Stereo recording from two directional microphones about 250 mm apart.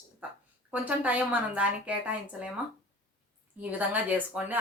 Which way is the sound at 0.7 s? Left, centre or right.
Centre.